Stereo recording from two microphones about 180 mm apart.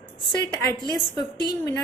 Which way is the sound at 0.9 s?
25° left (ahead or behind).